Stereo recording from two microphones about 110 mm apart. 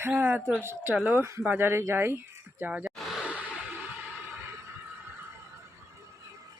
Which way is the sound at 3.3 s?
15° right (ahead or behind).